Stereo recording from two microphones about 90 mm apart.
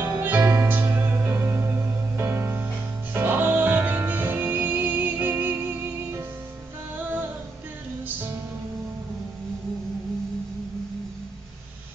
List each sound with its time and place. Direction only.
0.0 s music: 20° right (ahead or behind)